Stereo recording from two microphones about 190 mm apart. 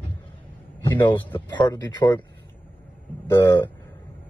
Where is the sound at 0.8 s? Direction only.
20° left (ahead or behind).